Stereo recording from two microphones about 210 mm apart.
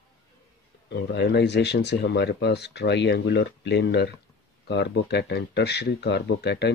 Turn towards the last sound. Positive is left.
turn(degrees=55)  # may be behind; listen again after turning